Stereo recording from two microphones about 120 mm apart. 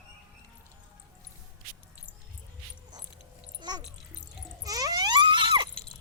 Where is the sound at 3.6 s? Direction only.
35° right (ahead or behind).